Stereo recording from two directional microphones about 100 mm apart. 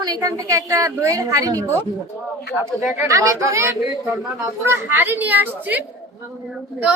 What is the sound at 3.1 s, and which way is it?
A woman's voice, 35° right (ahead or behind).